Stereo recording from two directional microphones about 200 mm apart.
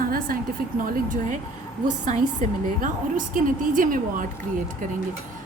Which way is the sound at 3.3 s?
45° right (ahead or behind).